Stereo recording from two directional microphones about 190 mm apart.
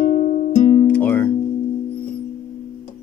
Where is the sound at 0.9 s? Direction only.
10° left (ahead or behind).